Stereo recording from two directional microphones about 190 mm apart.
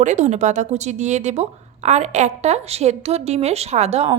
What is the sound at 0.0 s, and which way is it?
A woman's voice, 40° right (ahead or behind).